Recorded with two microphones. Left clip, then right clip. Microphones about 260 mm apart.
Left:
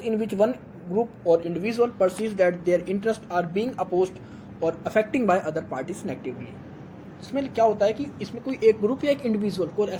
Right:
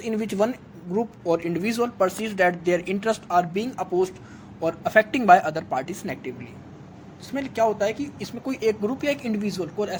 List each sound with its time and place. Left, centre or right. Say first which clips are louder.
0.0 s a man's voice: left 1 dB; right